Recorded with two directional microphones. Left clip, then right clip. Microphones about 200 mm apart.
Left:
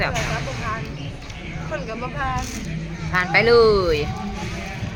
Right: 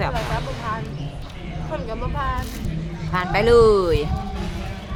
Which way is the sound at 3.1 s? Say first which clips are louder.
Left 1 dB; 10° right (ahead or behind).